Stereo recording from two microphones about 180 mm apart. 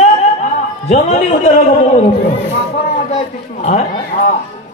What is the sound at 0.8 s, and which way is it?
A woman's voice, 40° left (ahead or behind).